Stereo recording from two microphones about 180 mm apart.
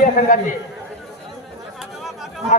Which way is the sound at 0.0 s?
45° left (ahead or behind).